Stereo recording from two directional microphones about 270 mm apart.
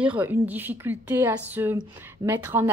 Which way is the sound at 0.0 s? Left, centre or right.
Centre.